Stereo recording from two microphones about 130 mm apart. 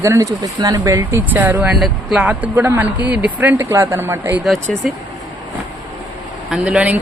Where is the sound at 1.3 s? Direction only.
15° right (ahead or behind).